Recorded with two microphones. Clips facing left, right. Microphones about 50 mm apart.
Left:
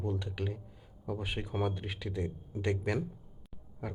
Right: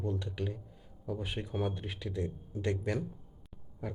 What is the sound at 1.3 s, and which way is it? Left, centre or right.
Speech, centre.